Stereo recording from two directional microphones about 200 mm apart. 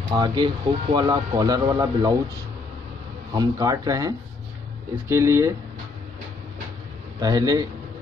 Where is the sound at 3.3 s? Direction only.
20° right (ahead or behind).